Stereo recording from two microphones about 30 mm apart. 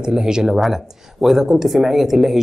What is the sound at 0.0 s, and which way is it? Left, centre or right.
Speech, right.